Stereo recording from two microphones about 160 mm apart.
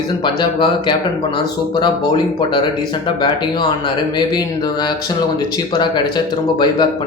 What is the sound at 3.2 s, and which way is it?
Speech, 30° left (ahead or behind).